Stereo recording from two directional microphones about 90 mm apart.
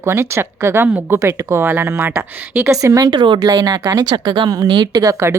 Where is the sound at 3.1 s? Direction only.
60° right (ahead or behind).